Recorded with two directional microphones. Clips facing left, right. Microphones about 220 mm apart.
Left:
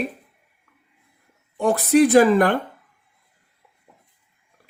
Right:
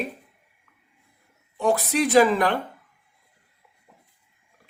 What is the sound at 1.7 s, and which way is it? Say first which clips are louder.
Speech: left 6 dB; 50° left (ahead or behind).